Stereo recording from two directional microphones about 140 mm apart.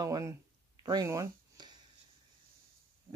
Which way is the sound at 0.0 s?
25° right (ahead or behind).